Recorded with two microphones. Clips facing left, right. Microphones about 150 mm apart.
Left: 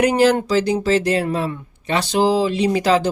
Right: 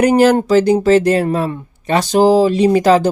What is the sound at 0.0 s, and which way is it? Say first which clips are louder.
Speech: right 4 dB; 45° right (ahead or behind).